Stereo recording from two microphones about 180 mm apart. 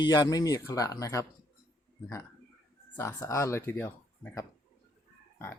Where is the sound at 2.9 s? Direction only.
15° left (ahead or behind).